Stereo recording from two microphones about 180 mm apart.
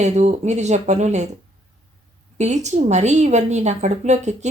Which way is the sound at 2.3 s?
40° right (ahead or behind).